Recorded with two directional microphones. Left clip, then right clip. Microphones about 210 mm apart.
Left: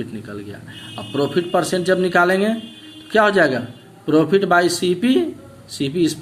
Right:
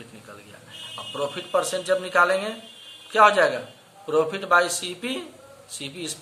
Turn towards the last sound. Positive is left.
turn(degrees=20)  # may be behind; listen again after turning